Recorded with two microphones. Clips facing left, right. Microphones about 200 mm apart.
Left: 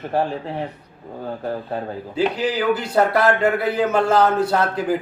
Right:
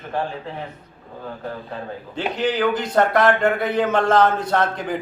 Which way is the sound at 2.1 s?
10° left (ahead or behind).